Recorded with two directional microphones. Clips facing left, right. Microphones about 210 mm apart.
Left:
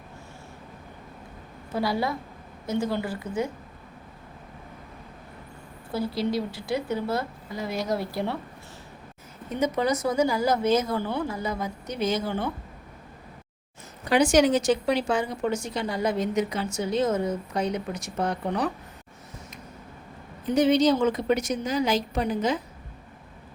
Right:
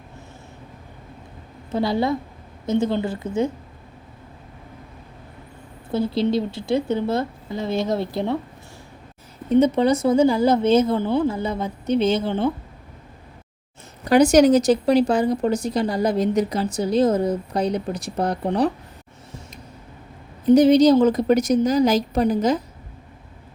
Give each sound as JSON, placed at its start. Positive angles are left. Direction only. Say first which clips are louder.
{"t": 1.7, "sound": "speech", "louder": "right 6 dB", "side_deg": -25}
{"t": 5.9, "sound": "speech", "louder": "right 6 dB", "side_deg": -25}
{"t": 9.5, "sound": "speech", "louder": "right 8 dB", "side_deg": -30}
{"t": 14.0, "sound": "a woman's voice", "louder": "right 6 dB", "side_deg": -40}
{"t": 20.5, "sound": "a woman's voice", "louder": "right 7 dB", "side_deg": -40}